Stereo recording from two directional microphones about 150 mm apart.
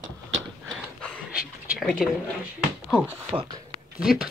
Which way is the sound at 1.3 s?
5° right (ahead or behind).